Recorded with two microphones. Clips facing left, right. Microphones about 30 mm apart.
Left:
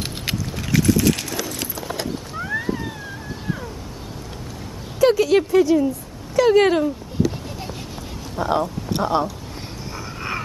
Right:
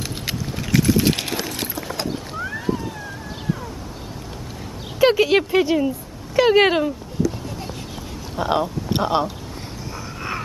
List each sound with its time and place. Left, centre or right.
0.7 s vehicle: centre
0.9 s a sound: right
5.0 s speech: right
8.4 s speech: right